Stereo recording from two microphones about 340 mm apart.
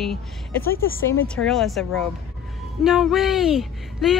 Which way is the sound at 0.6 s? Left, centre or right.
Left.